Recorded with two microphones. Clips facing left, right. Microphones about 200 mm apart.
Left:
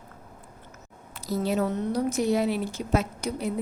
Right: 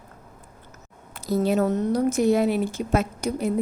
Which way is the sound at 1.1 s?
55° right (ahead or behind).